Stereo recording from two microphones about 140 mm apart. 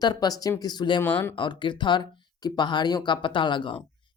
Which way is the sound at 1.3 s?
35° left (ahead or behind).